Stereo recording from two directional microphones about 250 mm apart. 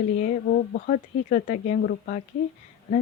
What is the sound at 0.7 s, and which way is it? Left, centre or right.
Speech, left.